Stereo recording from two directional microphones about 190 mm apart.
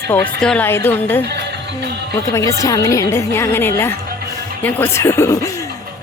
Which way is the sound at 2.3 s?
15° left (ahead or behind).